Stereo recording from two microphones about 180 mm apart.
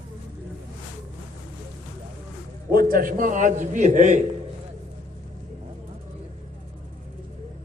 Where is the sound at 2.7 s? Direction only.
55° right (ahead or behind).